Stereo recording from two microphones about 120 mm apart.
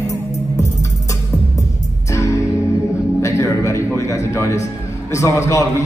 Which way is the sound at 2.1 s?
25° left (ahead or behind).